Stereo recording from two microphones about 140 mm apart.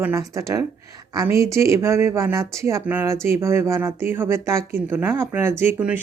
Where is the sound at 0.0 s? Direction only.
20° right (ahead or behind).